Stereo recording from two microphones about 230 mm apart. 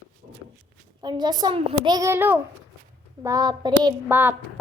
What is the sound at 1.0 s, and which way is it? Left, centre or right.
Speech, centre.